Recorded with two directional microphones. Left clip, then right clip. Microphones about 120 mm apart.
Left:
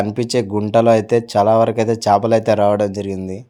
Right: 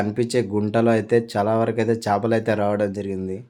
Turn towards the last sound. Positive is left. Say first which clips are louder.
# left 3 dB
turn(degrees=40)  # may be behind; listen again after turning